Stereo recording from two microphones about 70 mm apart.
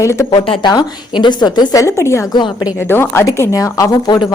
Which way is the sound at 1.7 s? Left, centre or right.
Left.